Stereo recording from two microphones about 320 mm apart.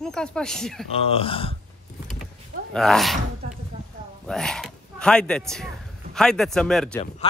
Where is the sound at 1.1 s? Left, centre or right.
Centre.